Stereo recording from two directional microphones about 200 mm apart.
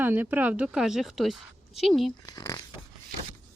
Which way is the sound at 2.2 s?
20° left (ahead or behind).